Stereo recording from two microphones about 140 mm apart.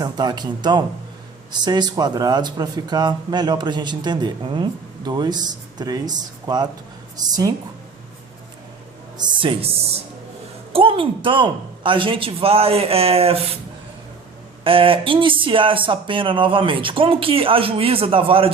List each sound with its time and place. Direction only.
0.0 s a woman's voice: 30° right (ahead or behind)
9.1 s speech: 35° right (ahead or behind)
14.6 s speech: 40° right (ahead or behind)